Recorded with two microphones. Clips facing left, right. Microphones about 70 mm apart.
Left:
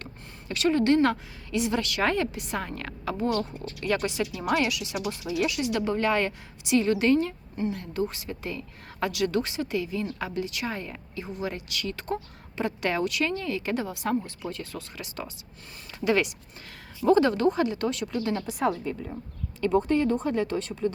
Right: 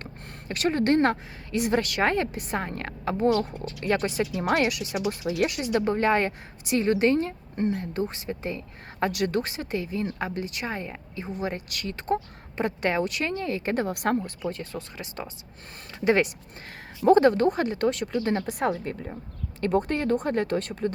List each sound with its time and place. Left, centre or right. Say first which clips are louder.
0.0 s a woman's voice: right 2 dB; right
13.8 s speech: right 3 dB; right
14.4 s a woman's voice: right 3 dB; right
19.6 s speech: left 1 dB; right